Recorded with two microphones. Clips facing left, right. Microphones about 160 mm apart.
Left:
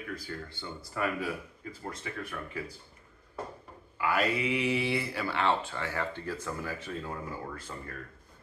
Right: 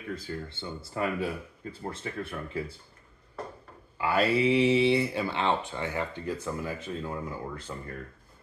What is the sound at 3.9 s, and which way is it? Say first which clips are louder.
Speech: right 4 dB; 30° right (ahead or behind).